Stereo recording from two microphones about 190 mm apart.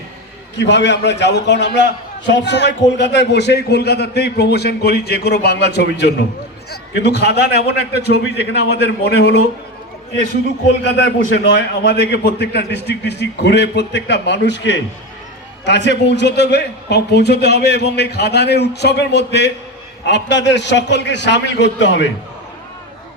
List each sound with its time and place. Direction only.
0.5 s a man's voice: 70° left (ahead or behind)
10.8 s a man's voice: 70° left (ahead or behind)